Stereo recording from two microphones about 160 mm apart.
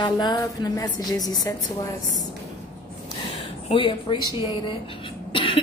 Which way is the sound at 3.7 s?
30° left (ahead or behind).